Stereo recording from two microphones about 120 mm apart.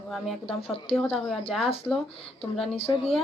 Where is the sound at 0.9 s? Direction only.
55° left (ahead or behind).